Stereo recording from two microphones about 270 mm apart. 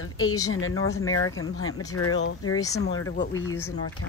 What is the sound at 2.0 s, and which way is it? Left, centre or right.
Speech, left.